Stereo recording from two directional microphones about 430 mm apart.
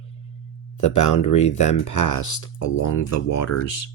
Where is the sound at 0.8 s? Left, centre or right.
Left.